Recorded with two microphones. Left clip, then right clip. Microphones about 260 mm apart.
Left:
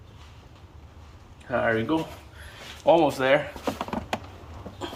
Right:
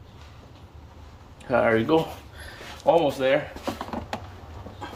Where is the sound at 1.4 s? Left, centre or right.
Right.